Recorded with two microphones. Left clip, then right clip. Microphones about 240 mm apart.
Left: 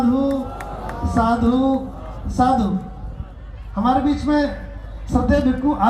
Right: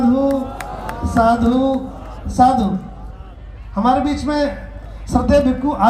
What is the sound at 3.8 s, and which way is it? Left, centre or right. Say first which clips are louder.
A man's voice: right 2 dB; right.